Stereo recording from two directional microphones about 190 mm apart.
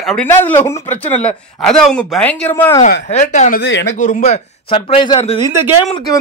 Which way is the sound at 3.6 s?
70° left (ahead or behind).